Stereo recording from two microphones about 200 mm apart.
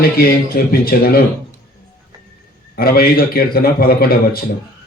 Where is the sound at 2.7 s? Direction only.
50° left (ahead or behind).